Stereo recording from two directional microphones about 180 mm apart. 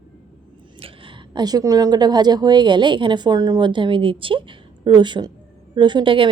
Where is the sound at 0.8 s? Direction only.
30° right (ahead or behind).